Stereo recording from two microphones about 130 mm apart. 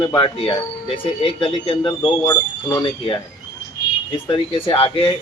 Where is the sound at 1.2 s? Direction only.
45° left (ahead or behind).